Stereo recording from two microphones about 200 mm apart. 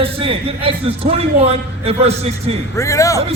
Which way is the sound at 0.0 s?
30° right (ahead or behind).